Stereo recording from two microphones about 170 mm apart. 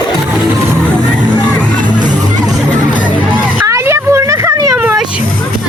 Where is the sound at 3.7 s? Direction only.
15° right (ahead or behind).